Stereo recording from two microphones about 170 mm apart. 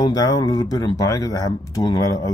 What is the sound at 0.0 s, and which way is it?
Speech, 20° left (ahead or behind).